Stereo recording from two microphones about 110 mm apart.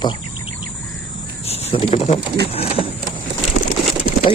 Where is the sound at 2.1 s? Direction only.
65° left (ahead or behind).